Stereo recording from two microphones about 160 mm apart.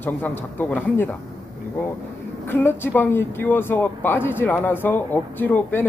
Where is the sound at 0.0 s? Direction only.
15° left (ahead or behind).